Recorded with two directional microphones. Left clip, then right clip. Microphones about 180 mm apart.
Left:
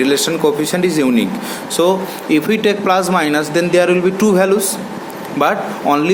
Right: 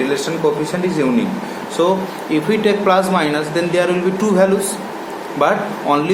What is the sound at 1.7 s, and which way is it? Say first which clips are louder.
Speech: left 2 dB; 40° left (ahead or behind).